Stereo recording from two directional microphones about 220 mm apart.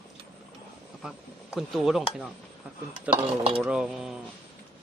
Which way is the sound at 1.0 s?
Centre (ahead or behind).